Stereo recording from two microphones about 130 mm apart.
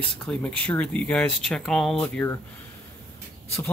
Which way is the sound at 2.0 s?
15° left (ahead or behind).